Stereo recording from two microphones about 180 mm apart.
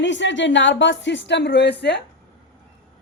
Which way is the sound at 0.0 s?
85° left.